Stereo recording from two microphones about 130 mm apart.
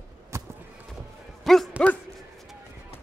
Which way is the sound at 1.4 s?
Centre (ahead or behind).